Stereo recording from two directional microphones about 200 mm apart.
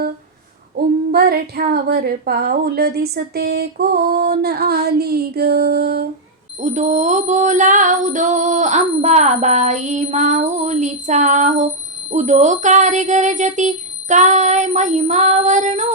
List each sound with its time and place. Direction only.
0.8 s female singing: 50° right (ahead or behind)
1.1 s a woman's voice: 50° right (ahead or behind)
6.6 s female singing: 35° right (ahead or behind)